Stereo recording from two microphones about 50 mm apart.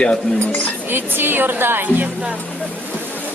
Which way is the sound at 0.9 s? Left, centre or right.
Right.